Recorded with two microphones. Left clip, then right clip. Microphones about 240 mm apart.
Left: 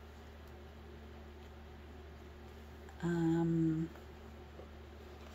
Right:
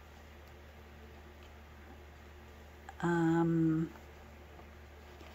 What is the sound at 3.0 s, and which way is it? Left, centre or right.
Speech, centre.